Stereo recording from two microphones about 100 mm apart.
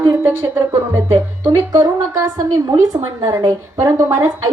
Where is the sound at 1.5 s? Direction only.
35° right (ahead or behind).